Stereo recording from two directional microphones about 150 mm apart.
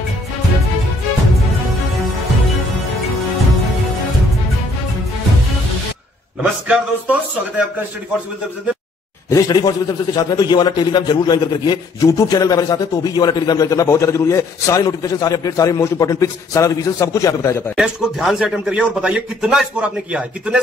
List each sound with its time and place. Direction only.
6.7 s speech: 10° right (ahead or behind)
9.3 s a man's voice: 25° left (ahead or behind)
17.7 s a man's voice: centre (ahead or behind)